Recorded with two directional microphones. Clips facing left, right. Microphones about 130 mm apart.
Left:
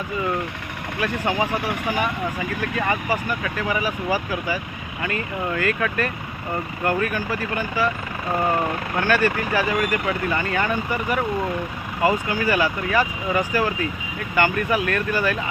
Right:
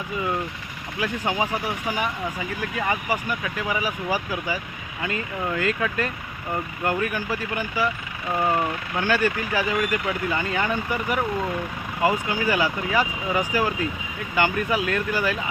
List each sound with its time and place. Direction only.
0.9 s speech: 15° right (ahead or behind)
2.6 s speech: 15° right (ahead or behind)
9.0 s speech: 15° right (ahead or behind)
12.3 s speech: 15° right (ahead or behind)